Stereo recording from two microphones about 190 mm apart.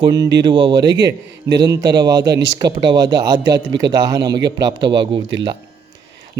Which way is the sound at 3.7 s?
70° right (ahead or behind).